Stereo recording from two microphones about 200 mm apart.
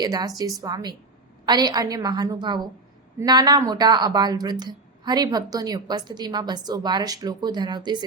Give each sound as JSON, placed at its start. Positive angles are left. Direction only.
{"t": 0.0, "sound": "speech", "side_deg": -20}